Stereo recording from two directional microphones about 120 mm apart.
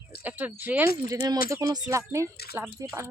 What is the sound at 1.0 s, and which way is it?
Speech, 30° right (ahead or behind).